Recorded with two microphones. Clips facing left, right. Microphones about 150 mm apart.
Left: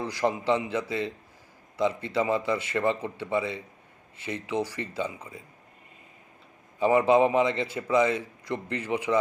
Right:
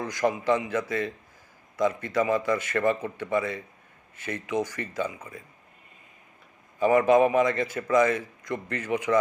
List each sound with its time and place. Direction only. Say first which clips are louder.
0.0 s a man's voice: right 1 dB; 30° left (ahead or behind)
6.7 s a man's voice: right 1 dB; 20° left (ahead or behind)